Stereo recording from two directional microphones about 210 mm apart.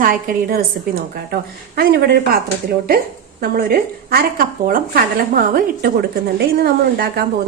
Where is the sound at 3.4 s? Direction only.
45° right (ahead or behind).